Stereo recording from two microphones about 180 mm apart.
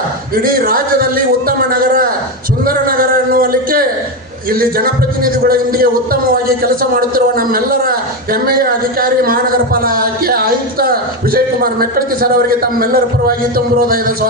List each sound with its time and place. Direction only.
0.3 s a man's voice: 55° right (ahead or behind)
2.6 s a sound: 55° right (ahead or behind)
4.4 s a man's voice: 55° right (ahead or behind)